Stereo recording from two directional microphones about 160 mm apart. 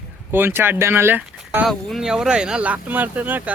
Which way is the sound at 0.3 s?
15° right (ahead or behind).